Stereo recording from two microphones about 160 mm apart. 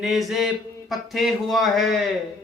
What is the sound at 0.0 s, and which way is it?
Speech, centre (ahead or behind).